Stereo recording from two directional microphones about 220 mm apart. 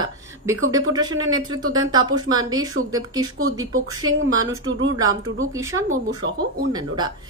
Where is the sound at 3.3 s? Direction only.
70° right (ahead or behind).